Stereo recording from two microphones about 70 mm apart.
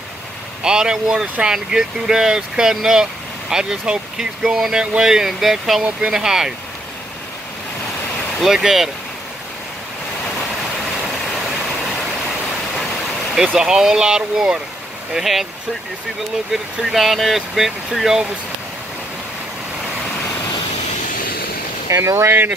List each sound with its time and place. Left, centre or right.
0.7 s speech: centre
8.4 s speech: centre
13.3 s speech: centre
16.7 s speech: centre
21.8 s speech: right